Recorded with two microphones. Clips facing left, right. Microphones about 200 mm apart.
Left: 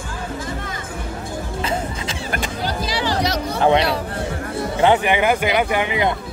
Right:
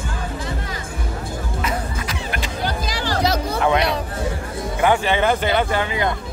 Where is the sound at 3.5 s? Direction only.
30° left (ahead or behind).